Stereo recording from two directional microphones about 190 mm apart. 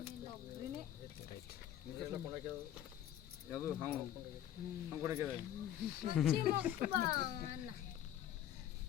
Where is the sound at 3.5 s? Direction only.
10° right (ahead or behind).